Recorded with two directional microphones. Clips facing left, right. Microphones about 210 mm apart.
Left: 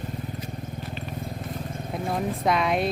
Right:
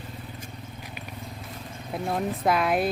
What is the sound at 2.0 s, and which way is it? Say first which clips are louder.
Speech: even; centre (ahead or behind).